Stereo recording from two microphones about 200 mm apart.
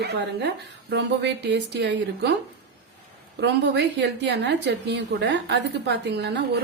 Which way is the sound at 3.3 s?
60° right (ahead or behind).